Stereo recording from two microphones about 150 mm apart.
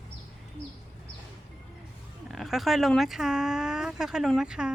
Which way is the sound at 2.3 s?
Centre (ahead or behind).